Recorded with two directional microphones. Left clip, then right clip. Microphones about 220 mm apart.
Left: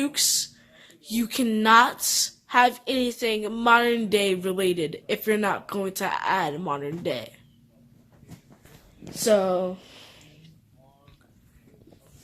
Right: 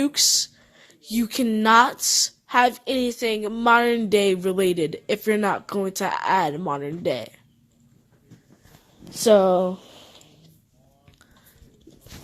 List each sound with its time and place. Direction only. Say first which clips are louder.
0.0 s speech: right 4 dB; 35° right (ahead or behind)
9.1 s speech: right 5 dB; 45° right (ahead or behind)